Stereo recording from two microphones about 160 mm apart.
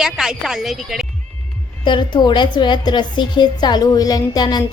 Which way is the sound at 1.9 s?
30° left (ahead or behind).